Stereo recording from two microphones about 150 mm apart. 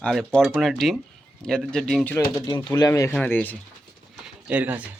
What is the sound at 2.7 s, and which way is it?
Speech, 25° left (ahead or behind).